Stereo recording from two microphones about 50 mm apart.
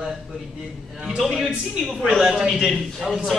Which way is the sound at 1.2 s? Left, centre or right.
Centre.